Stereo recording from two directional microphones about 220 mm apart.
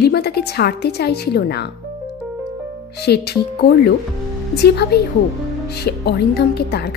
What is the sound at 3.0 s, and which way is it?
Speech, 45° left (ahead or behind).